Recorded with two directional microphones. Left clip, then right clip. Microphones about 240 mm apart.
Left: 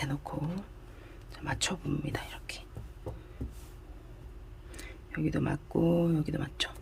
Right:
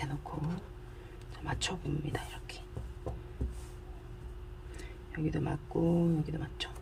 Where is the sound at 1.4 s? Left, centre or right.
Left.